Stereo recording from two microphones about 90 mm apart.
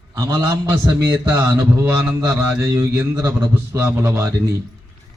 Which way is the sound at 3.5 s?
25° right (ahead or behind).